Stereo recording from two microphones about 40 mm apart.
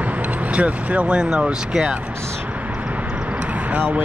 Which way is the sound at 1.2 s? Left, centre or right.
Right.